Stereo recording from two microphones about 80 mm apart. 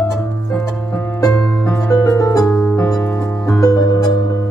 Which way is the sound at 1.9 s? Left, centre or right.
Left.